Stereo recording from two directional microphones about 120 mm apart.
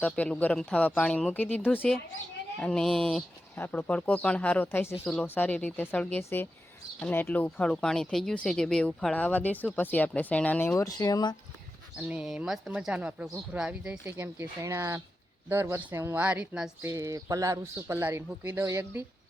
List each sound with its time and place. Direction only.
0.0 s speech: 10° left (ahead or behind)
3.5 s speech: 15° left (ahead or behind)
10.8 s speech: 30° left (ahead or behind)
11.9 s speech: 10° right (ahead or behind)
14.1 s a man's voice: 20° right (ahead or behind)
16.8 s a man's voice: 25° right (ahead or behind)